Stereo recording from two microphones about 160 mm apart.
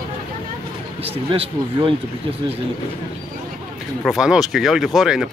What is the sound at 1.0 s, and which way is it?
Speech, 35° right (ahead or behind).